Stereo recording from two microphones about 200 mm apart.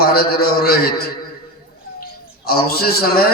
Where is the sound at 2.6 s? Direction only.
50° left (ahead or behind).